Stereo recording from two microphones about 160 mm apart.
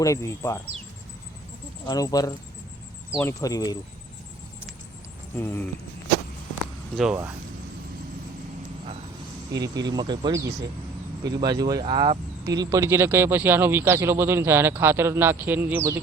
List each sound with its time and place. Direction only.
0.0 s speech: 20° left (ahead or behind)
1.9 s speech: 25° left (ahead or behind)
3.4 s speech: 20° left (ahead or behind)
5.4 s speech: 15° left (ahead or behind)
6.9 s speech: centre (ahead or behind)
9.6 s speech: 25° right (ahead or behind)